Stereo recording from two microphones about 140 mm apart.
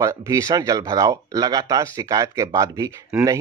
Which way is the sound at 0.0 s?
25° right (ahead or behind).